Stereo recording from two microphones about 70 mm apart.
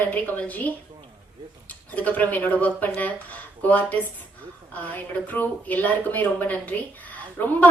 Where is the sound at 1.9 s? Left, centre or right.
Left.